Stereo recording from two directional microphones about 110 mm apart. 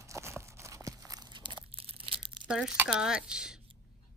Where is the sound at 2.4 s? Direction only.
5° right (ahead or behind).